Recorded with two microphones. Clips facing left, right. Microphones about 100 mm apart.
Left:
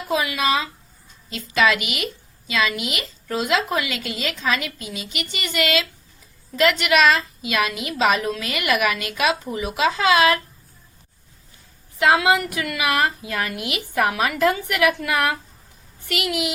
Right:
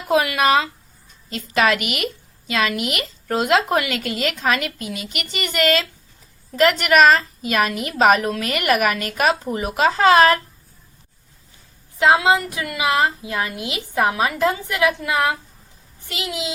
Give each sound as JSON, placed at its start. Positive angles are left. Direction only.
{"t": 0.1, "sound": "a woman's voice", "side_deg": -55}
{"t": 11.9, "sound": "a woman's voice", "side_deg": -25}